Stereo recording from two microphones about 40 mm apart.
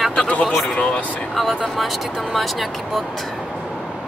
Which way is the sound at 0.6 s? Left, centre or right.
Left.